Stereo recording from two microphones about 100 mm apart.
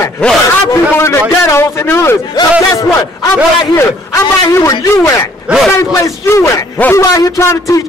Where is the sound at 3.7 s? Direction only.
30° left (ahead or behind).